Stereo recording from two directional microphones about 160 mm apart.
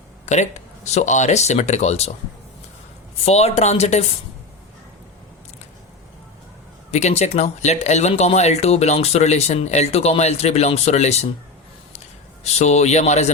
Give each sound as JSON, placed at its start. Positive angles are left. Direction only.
{"t": 0.3, "sound": "speech", "side_deg": 45}
{"t": 3.2, "sound": "speech", "side_deg": 40}
{"t": 6.9, "sound": "a man's voice", "side_deg": 45}